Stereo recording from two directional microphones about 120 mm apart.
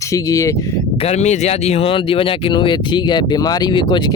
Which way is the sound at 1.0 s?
65° left (ahead or behind).